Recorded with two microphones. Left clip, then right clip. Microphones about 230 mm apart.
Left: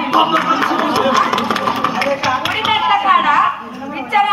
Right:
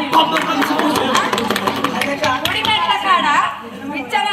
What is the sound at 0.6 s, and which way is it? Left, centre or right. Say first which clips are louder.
Music: left 2 dB; right.